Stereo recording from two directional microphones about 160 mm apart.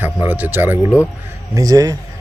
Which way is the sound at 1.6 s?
20° right (ahead or behind).